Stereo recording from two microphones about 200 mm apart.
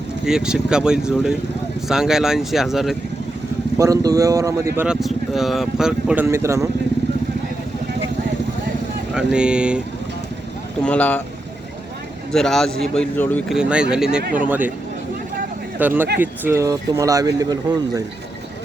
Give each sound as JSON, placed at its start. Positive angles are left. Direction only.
{"t": 0.3, "sound": "speech", "side_deg": -5}
{"t": 3.8, "sound": "speech", "side_deg": -15}
{"t": 4.9, "sound": "speech", "side_deg": 0}
{"t": 9.1, "sound": "speech", "side_deg": -5}
{"t": 10.8, "sound": "speech", "side_deg": 5}
{"t": 12.3, "sound": "speech", "side_deg": 0}
{"t": 13.6, "sound": "speech", "side_deg": -5}
{"t": 14.2, "sound": "speech", "side_deg": -50}
{"t": 14.4, "sound": "speech", "side_deg": -10}
{"t": 15.8, "sound": "speech", "side_deg": -10}